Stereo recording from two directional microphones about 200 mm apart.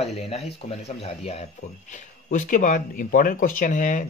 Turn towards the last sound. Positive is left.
turn(degrees=40)  # may be behind; listen again after turning